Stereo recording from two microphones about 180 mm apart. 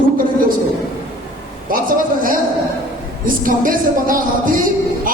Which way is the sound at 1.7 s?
50° right (ahead or behind).